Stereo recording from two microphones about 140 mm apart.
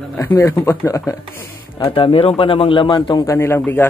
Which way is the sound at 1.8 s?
40° left (ahead or behind).